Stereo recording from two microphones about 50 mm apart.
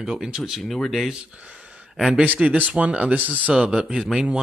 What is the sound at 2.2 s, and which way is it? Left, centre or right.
Speech, right.